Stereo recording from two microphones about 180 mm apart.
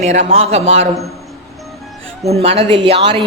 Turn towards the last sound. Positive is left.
turn(degrees=-25)  # may be behind; listen again after turning